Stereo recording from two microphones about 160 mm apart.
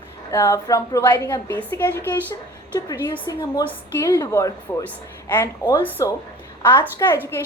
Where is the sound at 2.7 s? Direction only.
25° left (ahead or behind).